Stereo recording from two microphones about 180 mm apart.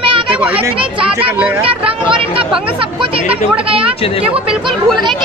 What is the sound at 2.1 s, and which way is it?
Speech, 30° right (ahead or behind).